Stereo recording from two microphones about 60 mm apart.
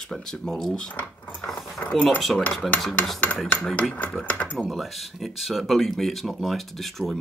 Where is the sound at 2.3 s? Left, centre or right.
Centre.